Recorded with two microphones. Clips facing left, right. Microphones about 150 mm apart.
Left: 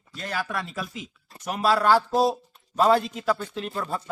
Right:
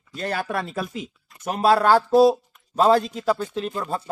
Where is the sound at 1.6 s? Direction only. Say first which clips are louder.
Right 4 dB; 45° right (ahead or behind).